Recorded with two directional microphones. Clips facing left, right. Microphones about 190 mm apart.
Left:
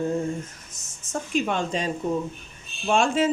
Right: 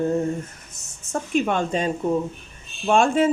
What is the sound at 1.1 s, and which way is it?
Speech, 55° right (ahead or behind).